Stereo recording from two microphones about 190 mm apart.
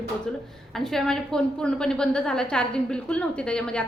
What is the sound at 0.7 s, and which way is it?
A woman's voice, centre (ahead or behind).